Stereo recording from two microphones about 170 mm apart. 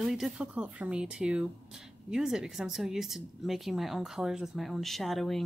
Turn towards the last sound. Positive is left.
turn(degrees=0)  # may be behind; listen again after turning